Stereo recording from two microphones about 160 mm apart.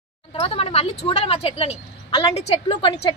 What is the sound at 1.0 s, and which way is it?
A woman's voice, 35° left (ahead or behind).